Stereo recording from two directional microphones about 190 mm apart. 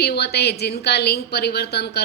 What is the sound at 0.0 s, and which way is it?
Speech, 55° left (ahead or behind).